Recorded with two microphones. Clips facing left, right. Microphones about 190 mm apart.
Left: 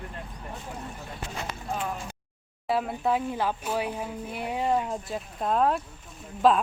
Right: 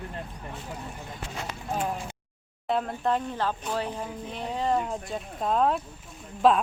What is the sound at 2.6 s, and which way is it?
Speech, 5° left (ahead or behind).